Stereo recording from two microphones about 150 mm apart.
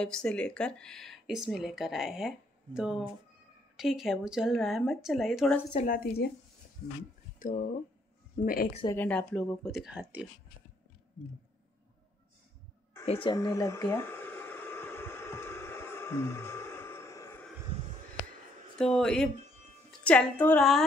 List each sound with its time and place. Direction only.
0.0 s speech: 5° left (ahead or behind)
5.9 s speech: 85° left
7.3 s speech: 60° left (ahead or behind)
8.5 s a woman's voice: 70° left (ahead or behind)
8.9 s speech: 10° left (ahead or behind); by 10.2 s 10° right (ahead or behind)
13.0 s speech: 40° left (ahead or behind)
13.3 s a sound: 25° left (ahead or behind)
18.8 s a woman's voice: 5° left (ahead or behind)